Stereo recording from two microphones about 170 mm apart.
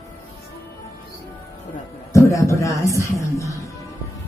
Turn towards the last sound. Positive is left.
turn(degrees=20)  # may be behind; listen again after turning